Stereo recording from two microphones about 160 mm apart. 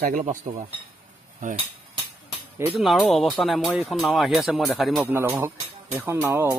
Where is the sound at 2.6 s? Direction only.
5° right (ahead or behind).